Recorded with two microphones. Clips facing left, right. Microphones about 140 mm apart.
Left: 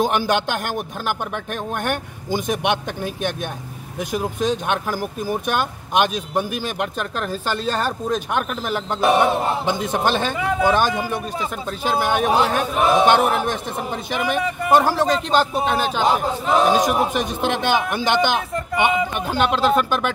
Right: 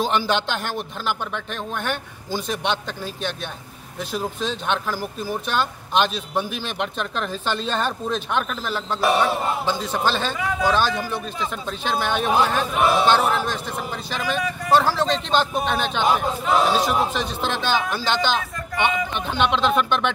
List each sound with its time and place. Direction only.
0.3 s a man's voice: 10° left (ahead or behind)
12.9 s a man's voice: 20° left (ahead or behind)